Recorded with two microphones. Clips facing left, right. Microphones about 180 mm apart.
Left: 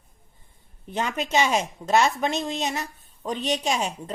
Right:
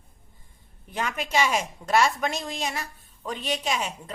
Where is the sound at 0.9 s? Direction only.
30° left (ahead or behind).